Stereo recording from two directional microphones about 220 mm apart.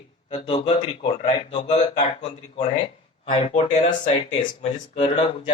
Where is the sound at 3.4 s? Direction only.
20° left (ahead or behind).